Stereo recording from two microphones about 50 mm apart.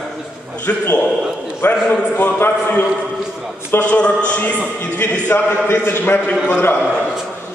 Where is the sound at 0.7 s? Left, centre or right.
Left.